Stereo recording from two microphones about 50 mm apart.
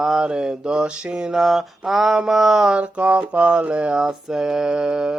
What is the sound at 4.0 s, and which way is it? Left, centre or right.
Mantra, centre.